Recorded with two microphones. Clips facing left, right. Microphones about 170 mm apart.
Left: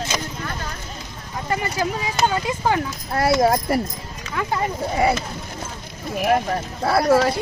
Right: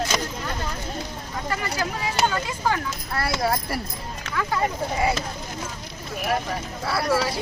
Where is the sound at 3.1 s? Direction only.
45° left (ahead or behind).